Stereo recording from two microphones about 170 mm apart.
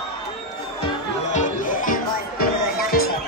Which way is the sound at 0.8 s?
45° left (ahead or behind).